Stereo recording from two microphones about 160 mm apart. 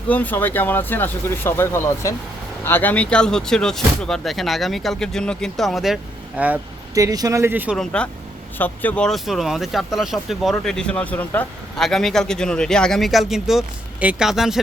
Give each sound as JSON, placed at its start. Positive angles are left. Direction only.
{"t": 0.1, "sound": "speech", "side_deg": 10}
{"t": 6.9, "sound": "speech", "side_deg": -20}
{"t": 7.8, "sound": "speech", "side_deg": 5}